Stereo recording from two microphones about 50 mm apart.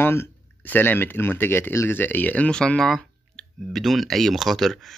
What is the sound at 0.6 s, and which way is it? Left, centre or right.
Speech, left.